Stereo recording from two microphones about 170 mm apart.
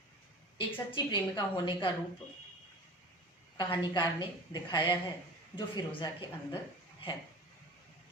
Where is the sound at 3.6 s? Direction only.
30° left (ahead or behind).